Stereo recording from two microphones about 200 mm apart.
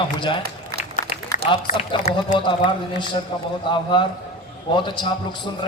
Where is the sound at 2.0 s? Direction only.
35° left (ahead or behind).